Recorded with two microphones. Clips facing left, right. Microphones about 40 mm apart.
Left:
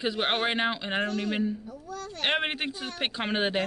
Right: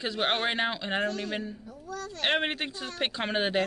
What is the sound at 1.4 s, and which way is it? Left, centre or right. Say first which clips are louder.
Speech: left 8 dB; centre.